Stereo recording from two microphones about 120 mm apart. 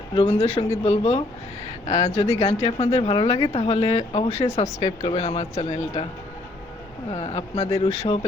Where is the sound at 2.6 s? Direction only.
55° left (ahead or behind).